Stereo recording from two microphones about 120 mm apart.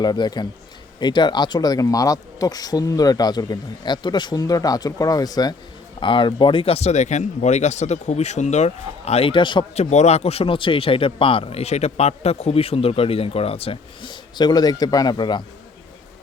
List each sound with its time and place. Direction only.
0.0 s speech: 35° left (ahead or behind)
6.0 s speech: 45° left (ahead or behind)
9.7 s speech: 70° left (ahead or behind); by 15.4 s 40° left (ahead or behind)